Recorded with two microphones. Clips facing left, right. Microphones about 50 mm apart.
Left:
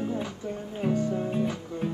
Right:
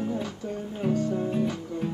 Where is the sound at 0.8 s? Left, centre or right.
Left.